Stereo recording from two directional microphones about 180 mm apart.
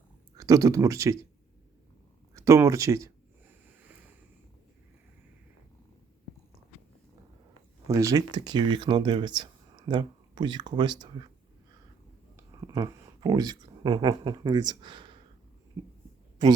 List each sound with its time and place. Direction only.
0.3 s speech: 20° right (ahead or behind)
2.3 s speech: 15° right (ahead or behind)
7.9 s speech: 15° right (ahead or behind)
12.6 s speech: 20° right (ahead or behind)